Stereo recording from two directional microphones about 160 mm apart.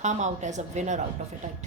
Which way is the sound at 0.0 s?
50° right (ahead or behind).